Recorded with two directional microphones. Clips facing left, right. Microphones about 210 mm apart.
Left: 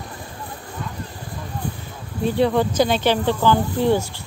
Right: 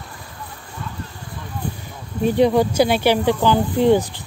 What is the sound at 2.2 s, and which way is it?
Speech, 15° right (ahead or behind).